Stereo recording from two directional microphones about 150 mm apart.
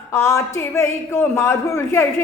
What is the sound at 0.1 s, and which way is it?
A man's voice, 20° left (ahead or behind).